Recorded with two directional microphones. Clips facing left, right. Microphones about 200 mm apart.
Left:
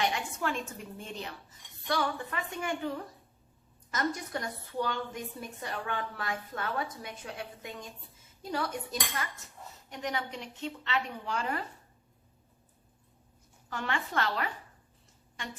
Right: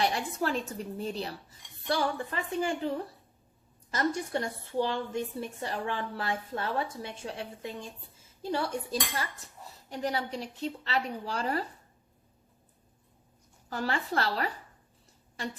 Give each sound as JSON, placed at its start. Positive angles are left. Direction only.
{"t": 0.0, "sound": "a woman's voice", "side_deg": -35}
{"t": 13.7, "sound": "a woman's voice", "side_deg": -35}